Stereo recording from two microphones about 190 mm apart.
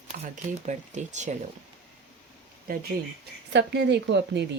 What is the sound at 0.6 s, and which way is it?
Speech, 40° right (ahead or behind).